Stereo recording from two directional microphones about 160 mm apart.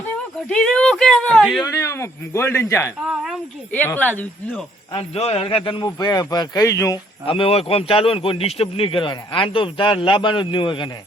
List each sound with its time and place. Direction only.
0.4 s speech: 5° left (ahead or behind)
1.6 s speech: 20° left (ahead or behind)
4.9 s a man's voice: 35° left (ahead or behind); by 7.0 s 20° left (ahead or behind)
7.3 s speech: 35° left (ahead or behind)